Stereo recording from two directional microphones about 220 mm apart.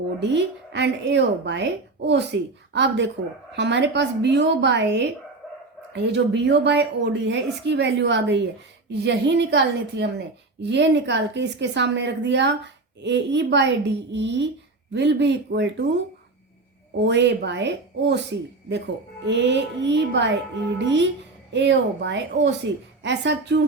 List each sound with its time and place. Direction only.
0.2 s a woman's voice: 50° right (ahead or behind)
17.0 s a woman's voice: 50° right (ahead or behind)